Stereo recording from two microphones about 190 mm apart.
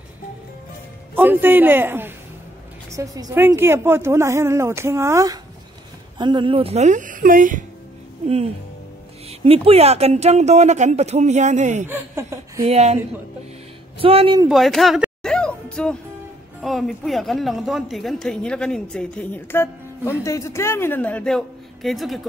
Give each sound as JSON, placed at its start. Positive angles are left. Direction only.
{"t": 1.1, "sound": "a woman's voice", "side_deg": -10}
{"t": 9.4, "sound": "speech", "side_deg": -30}
{"t": 11.9, "sound": "a woman's voice", "side_deg": -15}
{"t": 12.6, "sound": "speech", "side_deg": -35}
{"t": 14.5, "sound": "music", "side_deg": 0}
{"t": 16.6, "sound": "a woman's voice", "side_deg": 0}